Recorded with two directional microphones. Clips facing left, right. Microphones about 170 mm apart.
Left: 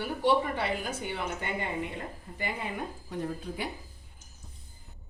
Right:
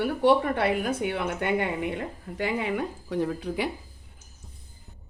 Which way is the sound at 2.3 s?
80° right.